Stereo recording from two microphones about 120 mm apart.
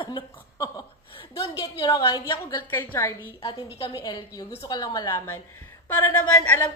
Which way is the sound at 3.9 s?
30° left (ahead or behind).